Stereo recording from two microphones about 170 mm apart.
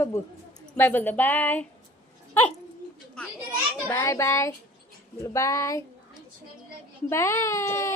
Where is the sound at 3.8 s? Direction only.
15° left (ahead or behind).